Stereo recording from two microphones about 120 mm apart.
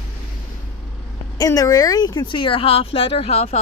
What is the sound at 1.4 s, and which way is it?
Speech, 30° left (ahead or behind).